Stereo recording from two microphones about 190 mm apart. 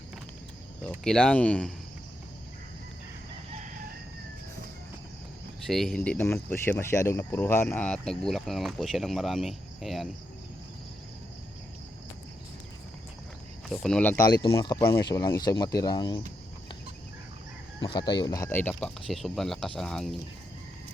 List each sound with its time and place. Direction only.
0.9 s speech: 5° left (ahead or behind)
5.6 s speech: centre (ahead or behind)
13.7 s speech: 5° left (ahead or behind); by 16.2 s 25° left (ahead or behind)
17.8 s speech: 25° left (ahead or behind); by 20.1 s centre (ahead or behind)